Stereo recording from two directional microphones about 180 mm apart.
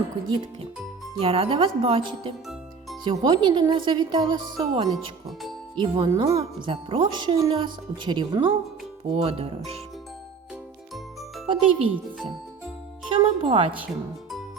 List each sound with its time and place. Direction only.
1.2 s speech: 30° right (ahead or behind)
11.4 s speech: 30° right (ahead or behind)